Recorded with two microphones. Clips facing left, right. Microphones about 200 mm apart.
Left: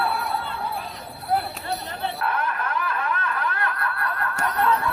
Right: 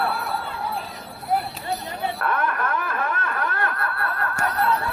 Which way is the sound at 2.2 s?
55° right (ahead or behind).